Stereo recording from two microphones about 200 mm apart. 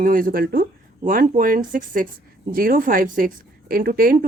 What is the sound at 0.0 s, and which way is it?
A woman's voice, 45° right (ahead or behind).